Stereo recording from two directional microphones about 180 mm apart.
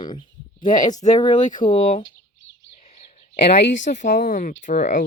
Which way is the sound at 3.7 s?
45° left (ahead or behind).